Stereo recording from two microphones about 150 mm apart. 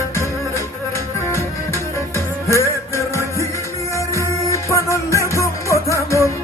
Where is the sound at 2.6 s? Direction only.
20° left (ahead or behind).